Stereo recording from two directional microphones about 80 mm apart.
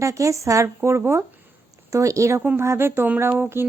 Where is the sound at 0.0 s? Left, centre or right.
Right.